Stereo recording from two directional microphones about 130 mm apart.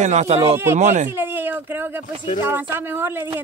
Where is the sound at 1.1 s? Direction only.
15° right (ahead or behind).